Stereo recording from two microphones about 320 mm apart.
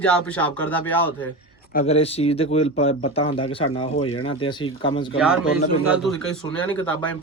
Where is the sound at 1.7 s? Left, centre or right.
Centre.